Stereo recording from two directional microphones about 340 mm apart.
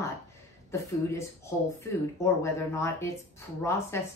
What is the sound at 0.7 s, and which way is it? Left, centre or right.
Speech, centre.